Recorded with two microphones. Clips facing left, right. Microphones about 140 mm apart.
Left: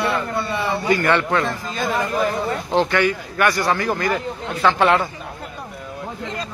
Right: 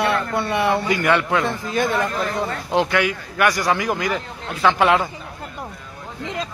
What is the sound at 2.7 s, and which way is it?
A man's voice, 5° right (ahead or behind).